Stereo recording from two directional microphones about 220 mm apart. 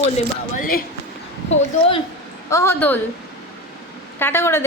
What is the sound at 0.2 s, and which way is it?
Speech, 35° left (ahead or behind).